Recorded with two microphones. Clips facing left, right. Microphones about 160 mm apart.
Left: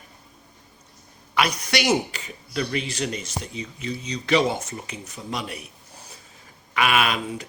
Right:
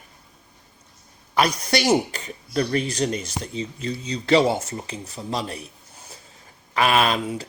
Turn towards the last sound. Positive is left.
turn(degrees=-35)  # may be behind; listen again after turning